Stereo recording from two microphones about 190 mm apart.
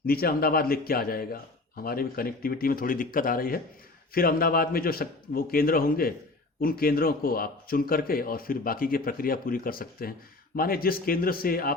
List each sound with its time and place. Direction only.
0.0 s speech: 50° left (ahead or behind)